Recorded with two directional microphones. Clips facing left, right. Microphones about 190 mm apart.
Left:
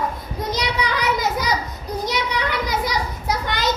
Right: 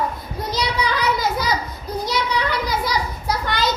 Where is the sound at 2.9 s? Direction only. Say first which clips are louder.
Right 1 dB; 20° left (ahead or behind).